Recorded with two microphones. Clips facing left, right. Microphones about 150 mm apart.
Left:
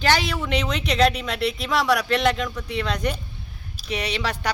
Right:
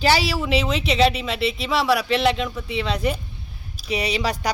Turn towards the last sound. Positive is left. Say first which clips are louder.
# right 3 dB
turn(degrees=-10)  # may be behind; listen again after turning